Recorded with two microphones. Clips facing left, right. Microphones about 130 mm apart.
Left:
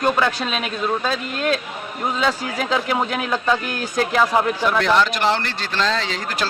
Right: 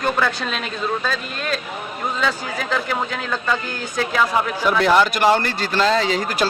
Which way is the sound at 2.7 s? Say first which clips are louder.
Left 2 dB; 15° left (ahead or behind).